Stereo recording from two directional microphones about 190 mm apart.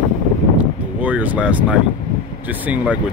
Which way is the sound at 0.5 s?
10° right (ahead or behind).